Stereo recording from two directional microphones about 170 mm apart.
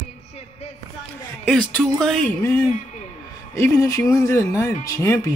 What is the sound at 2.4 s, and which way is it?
Speech, 15° left (ahead or behind).